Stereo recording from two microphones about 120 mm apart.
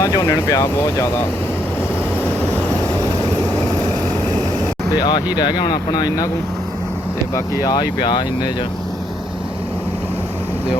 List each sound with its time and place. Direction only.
0.0 s speech: 30° left (ahead or behind)
4.9 s speech: 35° left (ahead or behind)
7.6 s speech: 35° left (ahead or behind)